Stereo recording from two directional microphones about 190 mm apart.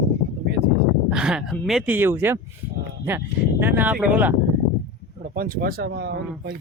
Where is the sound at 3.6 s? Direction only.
10° right (ahead or behind).